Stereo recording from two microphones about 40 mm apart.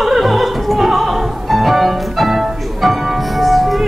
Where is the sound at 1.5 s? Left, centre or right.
Centre.